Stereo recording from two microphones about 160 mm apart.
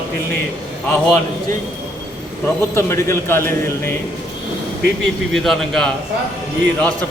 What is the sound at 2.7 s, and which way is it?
A man's voice, 15° left (ahead or behind).